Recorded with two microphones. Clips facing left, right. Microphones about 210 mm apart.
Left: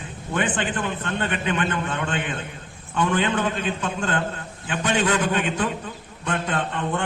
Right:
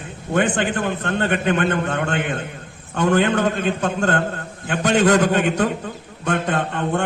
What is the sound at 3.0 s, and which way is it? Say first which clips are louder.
Speech: right 5 dB; 45° right (ahead or behind).